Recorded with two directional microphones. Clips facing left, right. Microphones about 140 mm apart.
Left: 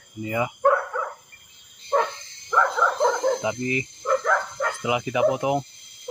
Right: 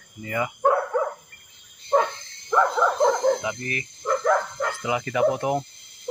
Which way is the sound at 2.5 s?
15° right (ahead or behind).